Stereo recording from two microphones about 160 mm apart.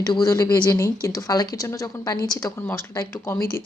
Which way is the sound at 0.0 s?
20° left (ahead or behind).